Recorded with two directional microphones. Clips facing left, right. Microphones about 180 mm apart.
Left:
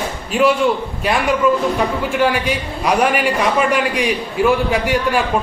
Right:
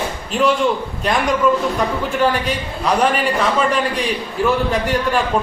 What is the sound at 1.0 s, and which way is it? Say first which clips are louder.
A man's voice: left 1 dB; 5° left (ahead or behind).